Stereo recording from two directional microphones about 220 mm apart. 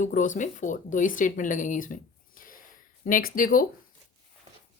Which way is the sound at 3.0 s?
40° left (ahead or behind).